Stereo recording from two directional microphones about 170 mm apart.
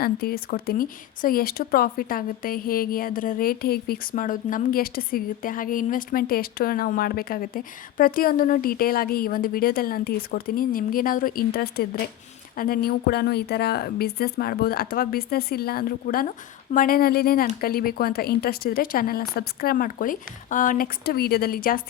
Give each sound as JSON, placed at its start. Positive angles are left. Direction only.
{"t": 0.0, "sound": "speech", "side_deg": 65}